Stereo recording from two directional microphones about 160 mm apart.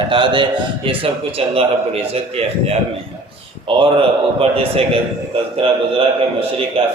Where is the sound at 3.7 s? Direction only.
35° right (ahead or behind).